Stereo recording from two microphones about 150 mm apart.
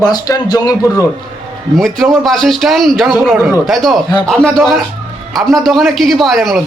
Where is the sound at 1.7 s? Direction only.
Centre (ahead or behind).